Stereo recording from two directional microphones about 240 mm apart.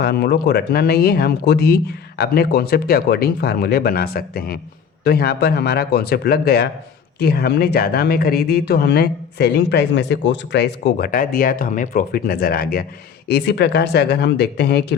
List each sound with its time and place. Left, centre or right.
0.0 s speech: left